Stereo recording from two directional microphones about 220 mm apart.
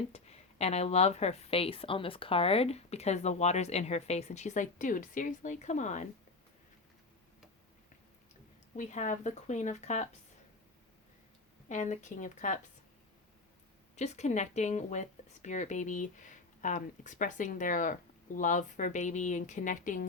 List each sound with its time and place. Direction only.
0.1 s a woman's voice: 30° left (ahead or behind)
8.7 s speech: 30° left (ahead or behind)
11.7 s speech: 35° left (ahead or behind)
13.9 s speech: 30° left (ahead or behind)